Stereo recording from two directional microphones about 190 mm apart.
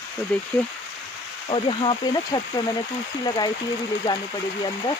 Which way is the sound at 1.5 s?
25° left (ahead or behind).